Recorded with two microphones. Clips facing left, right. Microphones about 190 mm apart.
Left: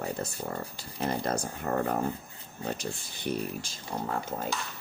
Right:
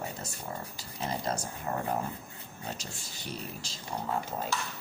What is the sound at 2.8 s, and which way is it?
Speech, 55° left (ahead or behind).